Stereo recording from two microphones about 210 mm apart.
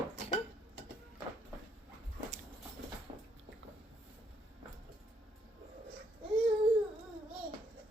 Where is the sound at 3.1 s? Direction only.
35° right (ahead or behind).